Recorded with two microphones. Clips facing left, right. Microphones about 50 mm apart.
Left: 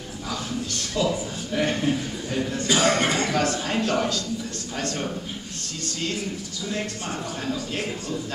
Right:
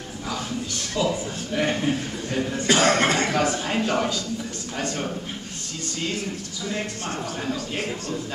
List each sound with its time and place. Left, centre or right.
1.0 s a man's voice: centre
2.6 s speech: right
3.3 s a man's voice: centre